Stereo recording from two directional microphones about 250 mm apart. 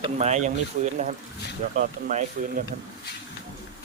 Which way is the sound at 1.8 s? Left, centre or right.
Right.